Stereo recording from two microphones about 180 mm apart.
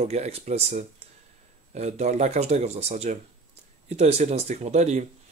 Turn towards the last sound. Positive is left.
turn(degrees=-40)  # may be behind; listen again after turning